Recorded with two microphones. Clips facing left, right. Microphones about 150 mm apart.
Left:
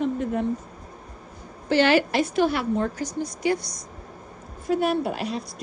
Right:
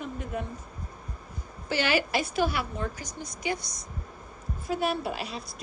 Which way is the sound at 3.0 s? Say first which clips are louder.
Left 10 dB; 20° right (ahead or behind).